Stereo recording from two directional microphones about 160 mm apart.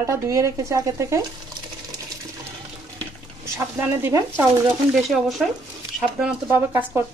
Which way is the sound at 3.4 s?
15° right (ahead or behind).